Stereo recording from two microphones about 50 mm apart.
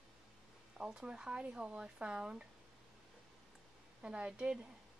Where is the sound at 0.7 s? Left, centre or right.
Centre.